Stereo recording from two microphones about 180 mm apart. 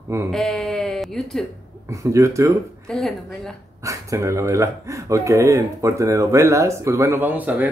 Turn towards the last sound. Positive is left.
turn(degrees=-10)  # may be behind; listen again after turning